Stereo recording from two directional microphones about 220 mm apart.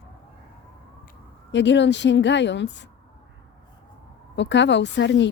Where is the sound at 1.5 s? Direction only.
55° left (ahead or behind).